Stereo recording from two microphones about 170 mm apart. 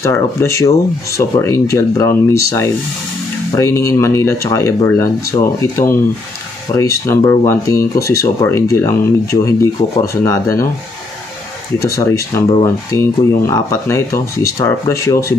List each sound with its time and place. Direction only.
0.0 s speech: 15° left (ahead or behind)
11.8 s speech: 15° left (ahead or behind)